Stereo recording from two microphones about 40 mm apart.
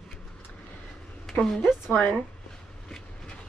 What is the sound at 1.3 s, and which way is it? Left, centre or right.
Speech, centre.